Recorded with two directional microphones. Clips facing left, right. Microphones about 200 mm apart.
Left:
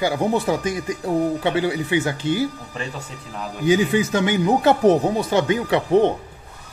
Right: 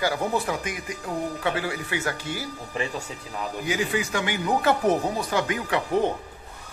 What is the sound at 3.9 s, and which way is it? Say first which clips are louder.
A man's voice: left 8 dB; 25° left (ahead or behind).